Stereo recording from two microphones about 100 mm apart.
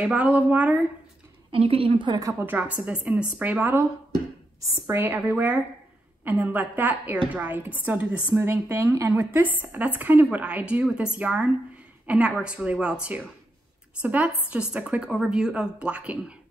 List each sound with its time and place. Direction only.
0.0 s a woman's voice: 10° right (ahead or behind)
1.5 s a woman's voice: 70° right (ahead or behind)
2.4 s a woman's voice: 15° right (ahead or behind)
4.6 s a woman's voice: 30° right (ahead or behind); by 16.3 s 10° right (ahead or behind)